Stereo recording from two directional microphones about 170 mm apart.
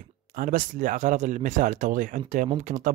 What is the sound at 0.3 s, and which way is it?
Speech, 55° right (ahead or behind).